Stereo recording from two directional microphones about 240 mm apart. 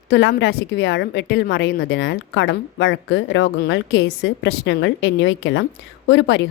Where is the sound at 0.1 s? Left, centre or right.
Left.